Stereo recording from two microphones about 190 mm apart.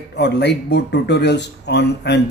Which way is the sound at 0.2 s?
60° left (ahead or behind).